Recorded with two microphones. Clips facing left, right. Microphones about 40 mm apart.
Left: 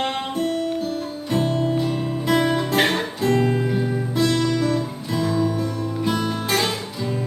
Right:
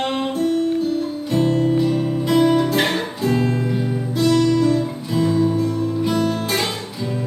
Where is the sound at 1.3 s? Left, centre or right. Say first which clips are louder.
Right 4 dB; left.